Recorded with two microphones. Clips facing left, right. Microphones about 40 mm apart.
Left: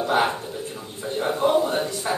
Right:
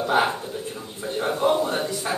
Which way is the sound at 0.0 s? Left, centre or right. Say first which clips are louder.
Even; centre.